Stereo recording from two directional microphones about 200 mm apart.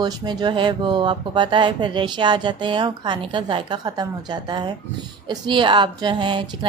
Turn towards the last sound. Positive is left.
turn(degrees=-25)  # may be behind; listen again after turning